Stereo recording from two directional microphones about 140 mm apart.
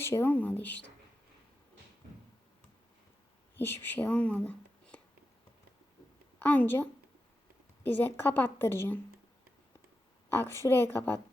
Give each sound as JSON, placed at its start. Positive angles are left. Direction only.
{"t": 0.0, "sound": "a woman's voice", "side_deg": 15}
{"t": 3.6, "sound": "speech", "side_deg": 15}
{"t": 6.4, "sound": "a woman's voice", "side_deg": 10}
{"t": 7.9, "sound": "a woman's voice", "side_deg": 15}
{"t": 10.3, "sound": "a woman's voice", "side_deg": 20}